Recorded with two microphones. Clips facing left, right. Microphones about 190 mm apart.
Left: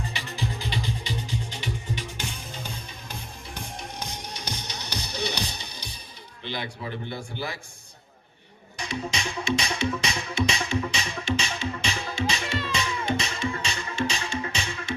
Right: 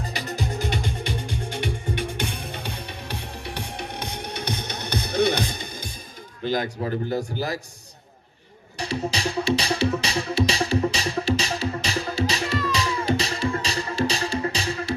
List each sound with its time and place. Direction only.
0.0 s music: 40° right (ahead or behind)
6.4 s a man's voice: 45° right (ahead or behind)
8.8 s music: 35° right (ahead or behind)